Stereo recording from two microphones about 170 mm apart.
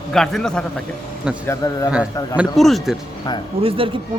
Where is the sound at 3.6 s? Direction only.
30° right (ahead or behind).